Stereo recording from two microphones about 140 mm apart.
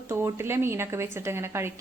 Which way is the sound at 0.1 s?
20° right (ahead or behind).